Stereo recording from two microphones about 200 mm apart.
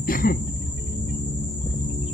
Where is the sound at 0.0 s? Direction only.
45° left (ahead or behind).